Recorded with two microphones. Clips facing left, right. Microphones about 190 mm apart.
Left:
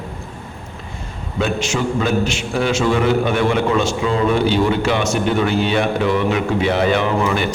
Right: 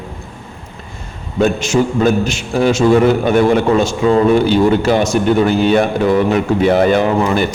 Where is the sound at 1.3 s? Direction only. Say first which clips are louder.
Right 7 dB; 45° right (ahead or behind).